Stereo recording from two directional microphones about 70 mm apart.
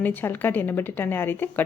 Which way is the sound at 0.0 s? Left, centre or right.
Left.